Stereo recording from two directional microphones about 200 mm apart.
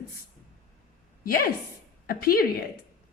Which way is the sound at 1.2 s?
45° left (ahead or behind).